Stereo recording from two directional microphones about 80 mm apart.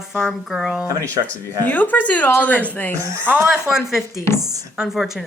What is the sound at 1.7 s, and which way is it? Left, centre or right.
Speech, left.